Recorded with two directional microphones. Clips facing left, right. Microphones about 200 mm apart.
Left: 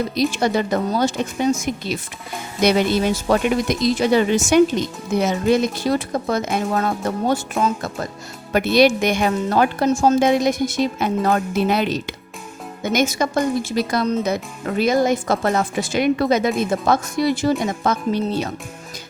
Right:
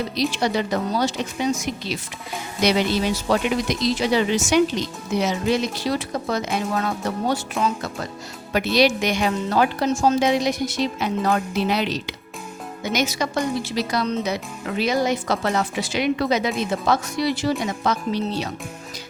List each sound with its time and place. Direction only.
0.2 s speech: 50° left (ahead or behind)